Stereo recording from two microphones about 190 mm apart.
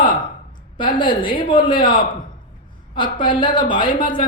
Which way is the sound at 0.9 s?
25° left (ahead or behind).